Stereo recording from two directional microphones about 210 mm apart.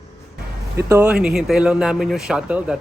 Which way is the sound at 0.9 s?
10° right (ahead or behind).